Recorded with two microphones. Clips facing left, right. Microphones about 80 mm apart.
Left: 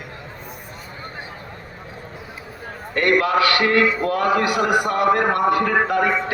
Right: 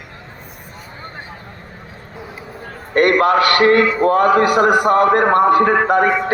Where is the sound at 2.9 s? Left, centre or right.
Right.